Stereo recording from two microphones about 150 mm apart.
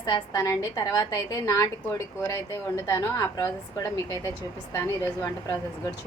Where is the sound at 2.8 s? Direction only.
20° left (ahead or behind).